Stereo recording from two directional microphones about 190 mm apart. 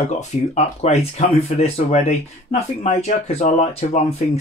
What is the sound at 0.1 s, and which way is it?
Speech, 35° left (ahead or behind).